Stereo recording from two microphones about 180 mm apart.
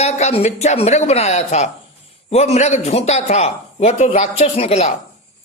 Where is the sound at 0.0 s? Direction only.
35° left (ahead or behind).